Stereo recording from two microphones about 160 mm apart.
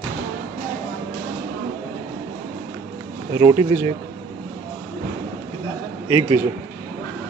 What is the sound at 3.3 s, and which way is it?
Speech, 20° right (ahead or behind).